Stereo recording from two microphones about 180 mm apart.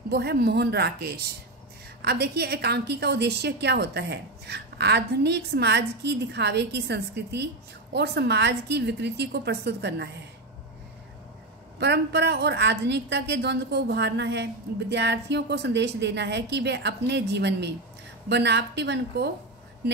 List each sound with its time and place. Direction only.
0.1 s a woman's voice: 60° right (ahead or behind)
11.8 s a woman's voice: 65° right (ahead or behind)